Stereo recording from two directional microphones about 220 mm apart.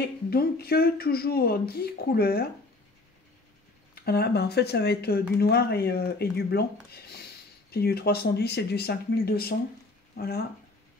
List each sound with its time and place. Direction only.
0.3 s speech: 45° left (ahead or behind)
4.0 s speech: 45° left (ahead or behind)